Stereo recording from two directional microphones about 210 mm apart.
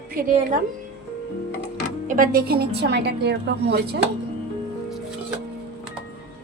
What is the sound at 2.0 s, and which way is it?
A woman's voice, 40° right (ahead or behind).